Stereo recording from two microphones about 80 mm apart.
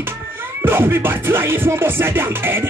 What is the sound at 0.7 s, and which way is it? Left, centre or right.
Music, right.